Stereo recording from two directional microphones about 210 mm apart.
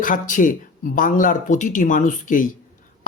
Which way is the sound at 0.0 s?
40° left (ahead or behind).